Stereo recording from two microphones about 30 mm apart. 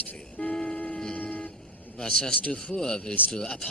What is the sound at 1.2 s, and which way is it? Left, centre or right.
Vehicle, left.